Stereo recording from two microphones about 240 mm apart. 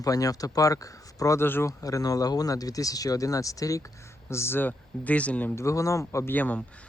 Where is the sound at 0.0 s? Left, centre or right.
Centre.